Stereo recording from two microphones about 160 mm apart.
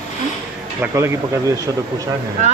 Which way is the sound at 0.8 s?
15° right (ahead or behind).